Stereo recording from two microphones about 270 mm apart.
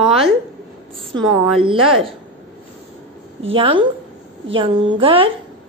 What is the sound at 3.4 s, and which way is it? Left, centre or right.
Speech, centre.